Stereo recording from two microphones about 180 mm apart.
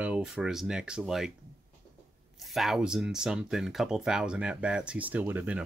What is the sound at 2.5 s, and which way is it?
Speech, centre (ahead or behind).